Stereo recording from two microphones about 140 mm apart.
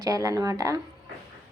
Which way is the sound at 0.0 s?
25° right (ahead or behind).